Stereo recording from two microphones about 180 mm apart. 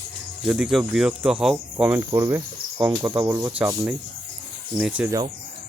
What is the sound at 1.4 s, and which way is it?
Cricket, 5° right (ahead or behind).